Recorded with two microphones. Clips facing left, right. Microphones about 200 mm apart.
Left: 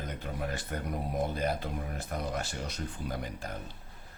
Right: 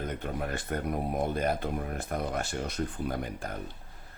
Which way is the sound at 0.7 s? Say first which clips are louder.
Right 7 dB; 55° right (ahead or behind).